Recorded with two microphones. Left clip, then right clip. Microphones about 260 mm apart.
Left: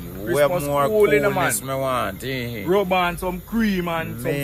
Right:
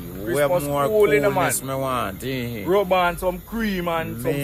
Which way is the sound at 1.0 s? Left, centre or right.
Right.